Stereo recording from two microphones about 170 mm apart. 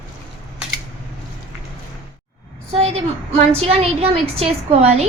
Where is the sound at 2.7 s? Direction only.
40° right (ahead or behind).